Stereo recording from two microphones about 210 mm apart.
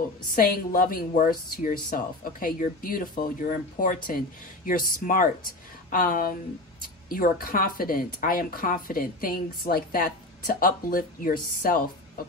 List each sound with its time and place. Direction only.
0.4 s a woman's voice: 40° left (ahead or behind)